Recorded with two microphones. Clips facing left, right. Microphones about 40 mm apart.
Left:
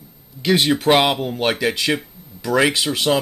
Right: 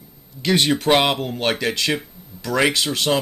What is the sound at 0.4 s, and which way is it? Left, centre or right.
Speech, centre.